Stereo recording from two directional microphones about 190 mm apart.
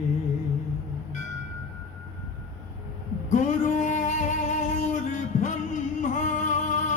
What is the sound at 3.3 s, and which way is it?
Music, 40° left (ahead or behind).